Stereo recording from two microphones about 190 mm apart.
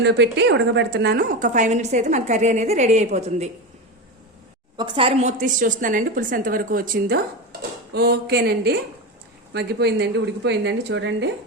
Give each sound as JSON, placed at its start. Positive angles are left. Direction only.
{"t": 0.0, "sound": "a woman's voice", "side_deg": -65}
{"t": 4.8, "sound": "a woman's voice", "side_deg": -25}